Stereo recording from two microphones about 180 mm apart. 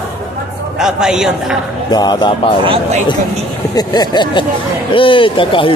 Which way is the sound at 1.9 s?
25° left (ahead or behind).